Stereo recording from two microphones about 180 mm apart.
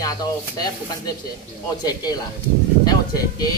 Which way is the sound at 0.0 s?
20° left (ahead or behind).